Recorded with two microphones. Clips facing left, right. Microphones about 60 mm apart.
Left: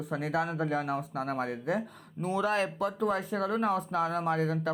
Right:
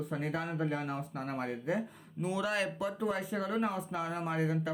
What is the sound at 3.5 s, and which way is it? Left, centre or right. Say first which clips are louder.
Speech: left 6 dB; left.